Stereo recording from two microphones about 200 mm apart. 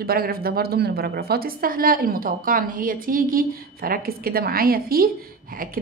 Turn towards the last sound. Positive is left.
turn(degrees=-50)  # may be behind; listen again after turning